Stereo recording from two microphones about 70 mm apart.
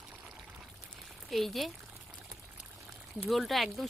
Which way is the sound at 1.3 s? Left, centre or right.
Centre.